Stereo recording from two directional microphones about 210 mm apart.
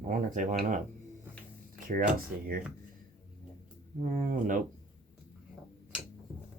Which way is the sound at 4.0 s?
35° right (ahead or behind).